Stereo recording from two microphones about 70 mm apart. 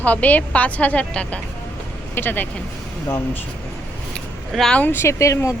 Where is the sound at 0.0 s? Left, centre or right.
Left.